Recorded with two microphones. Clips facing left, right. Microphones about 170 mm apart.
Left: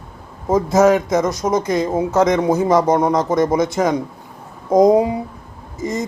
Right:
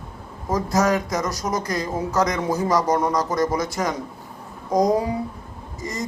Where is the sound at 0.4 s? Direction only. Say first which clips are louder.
Left 7 dB; 25° left (ahead or behind).